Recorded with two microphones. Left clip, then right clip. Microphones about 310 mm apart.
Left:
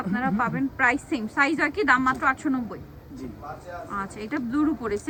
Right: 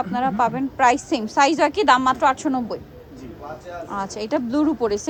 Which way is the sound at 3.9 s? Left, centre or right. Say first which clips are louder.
Right 7 dB; centre.